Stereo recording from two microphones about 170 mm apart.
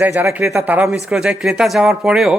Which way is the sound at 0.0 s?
10° right (ahead or behind).